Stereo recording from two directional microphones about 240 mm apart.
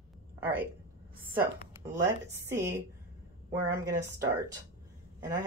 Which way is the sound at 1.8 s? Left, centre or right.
Right.